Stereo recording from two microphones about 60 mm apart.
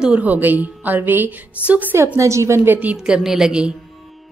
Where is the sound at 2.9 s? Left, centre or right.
Centre.